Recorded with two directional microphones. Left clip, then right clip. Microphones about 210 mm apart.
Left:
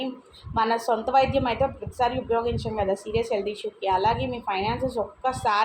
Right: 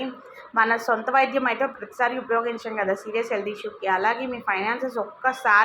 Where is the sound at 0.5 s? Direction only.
10° right (ahead or behind).